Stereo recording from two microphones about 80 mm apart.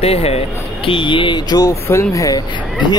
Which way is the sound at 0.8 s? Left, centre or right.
Left.